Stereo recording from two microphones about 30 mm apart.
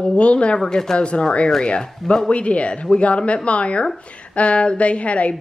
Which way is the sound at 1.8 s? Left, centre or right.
Centre.